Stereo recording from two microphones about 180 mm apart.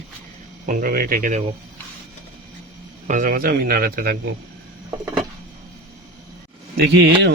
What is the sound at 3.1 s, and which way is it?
A man's voice, 50° right (ahead or behind).